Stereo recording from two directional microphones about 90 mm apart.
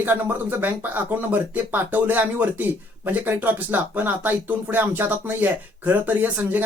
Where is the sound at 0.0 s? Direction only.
20° right (ahead or behind).